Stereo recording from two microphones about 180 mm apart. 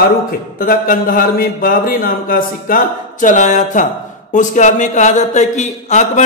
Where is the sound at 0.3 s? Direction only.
55° left (ahead or behind).